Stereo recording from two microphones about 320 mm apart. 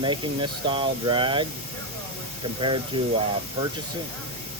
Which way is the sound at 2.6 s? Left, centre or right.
Centre.